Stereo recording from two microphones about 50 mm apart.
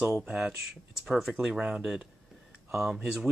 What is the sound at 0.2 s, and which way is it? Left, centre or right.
Speech, centre.